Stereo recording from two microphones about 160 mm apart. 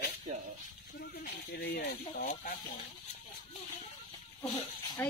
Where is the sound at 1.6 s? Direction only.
70° left (ahead or behind).